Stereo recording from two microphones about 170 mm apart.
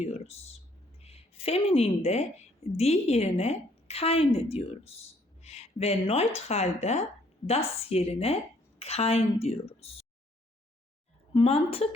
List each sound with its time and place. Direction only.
0.0 s a sound: 40° left (ahead or behind)
1.0 s a woman's voice: 35° left (ahead or behind)
11.3 s a woman's voice: 35° left (ahead or behind)